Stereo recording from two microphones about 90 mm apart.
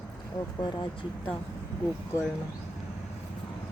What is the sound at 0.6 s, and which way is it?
Speech, 55° left (ahead or behind).